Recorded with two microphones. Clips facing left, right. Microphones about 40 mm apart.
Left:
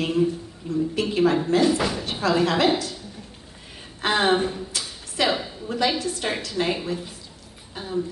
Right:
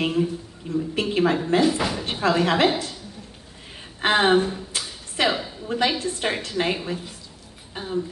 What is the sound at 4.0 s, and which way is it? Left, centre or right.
Speech, right.